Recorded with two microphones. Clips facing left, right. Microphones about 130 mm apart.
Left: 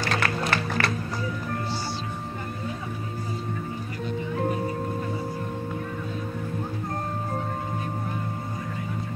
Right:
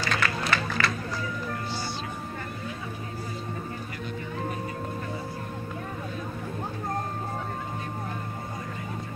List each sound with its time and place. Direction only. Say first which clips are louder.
0.0 s music: left 2 dB; 55° left (ahead or behind)